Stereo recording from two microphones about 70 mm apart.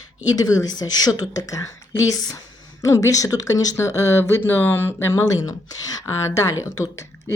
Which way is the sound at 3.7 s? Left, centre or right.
Left.